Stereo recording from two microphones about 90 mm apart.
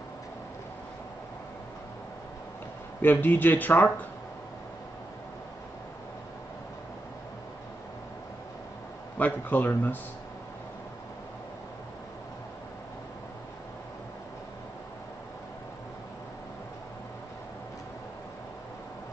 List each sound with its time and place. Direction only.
3.0 s speech: 20° left (ahead or behind)
9.2 s speech: 20° left (ahead or behind)